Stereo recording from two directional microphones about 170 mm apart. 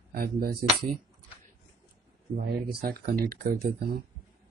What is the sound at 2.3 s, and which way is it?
Speech, 60° right (ahead or behind).